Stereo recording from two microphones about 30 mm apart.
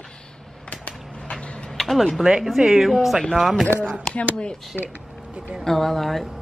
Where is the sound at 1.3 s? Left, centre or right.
Centre.